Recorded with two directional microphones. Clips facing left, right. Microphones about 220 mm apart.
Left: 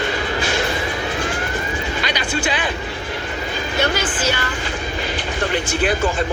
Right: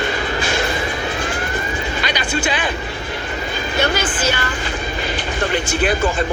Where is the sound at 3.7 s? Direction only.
50° right (ahead or behind).